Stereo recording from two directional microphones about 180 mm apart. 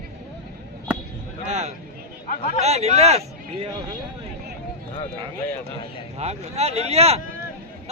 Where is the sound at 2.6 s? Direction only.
35° right (ahead or behind).